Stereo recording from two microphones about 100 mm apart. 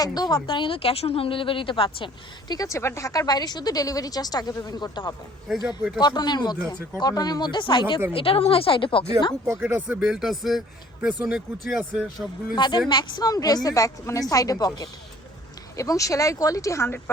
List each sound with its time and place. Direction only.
0.0 s speech: 40° left (ahead or behind)
0.3 s a woman's voice: 55° left (ahead or behind)
2.5 s a woman's voice: 35° left (ahead or behind)
5.6 s speech: 10° right (ahead or behind)
6.0 s speech: 45° left (ahead or behind)
8.1 s a woman's voice: 65° left (ahead or behind)
9.6 s speech: 20° right (ahead or behind)
10.0 s speech: 5° right (ahead or behind)
12.5 s a woman's voice: 50° left (ahead or behind); by 17.0 s 30° left (ahead or behind)